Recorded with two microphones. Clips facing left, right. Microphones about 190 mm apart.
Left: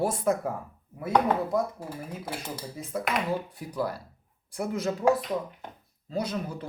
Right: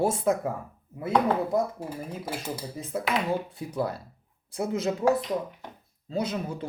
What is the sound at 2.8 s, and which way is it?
Speech, 25° right (ahead or behind).